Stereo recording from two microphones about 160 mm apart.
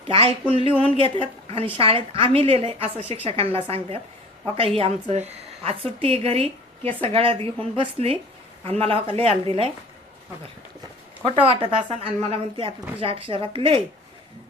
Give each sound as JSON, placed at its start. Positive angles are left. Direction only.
{"t": 0.1, "sound": "a woman's voice", "side_deg": -35}
{"t": 11.3, "sound": "a woman's voice", "side_deg": -35}